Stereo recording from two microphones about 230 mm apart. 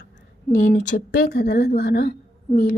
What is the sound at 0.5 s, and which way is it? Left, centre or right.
A woman's voice, left.